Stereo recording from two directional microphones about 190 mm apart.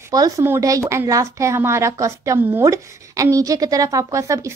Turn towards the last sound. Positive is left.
turn(degrees=-15)  # may be behind; listen again after turning